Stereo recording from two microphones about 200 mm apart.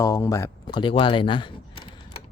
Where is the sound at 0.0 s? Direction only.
15° left (ahead or behind).